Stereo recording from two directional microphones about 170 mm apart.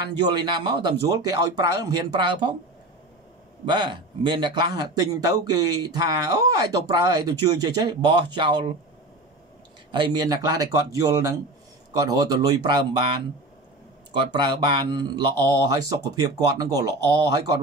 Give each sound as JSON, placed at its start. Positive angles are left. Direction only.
{"t": 0.0, "sound": "a man's voice", "side_deg": -25}
{"t": 3.6, "sound": "a man's voice", "side_deg": -25}
{"t": 9.8, "sound": "a man's voice", "side_deg": -25}